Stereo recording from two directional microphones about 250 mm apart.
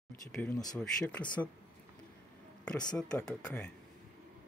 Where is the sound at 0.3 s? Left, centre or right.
Centre.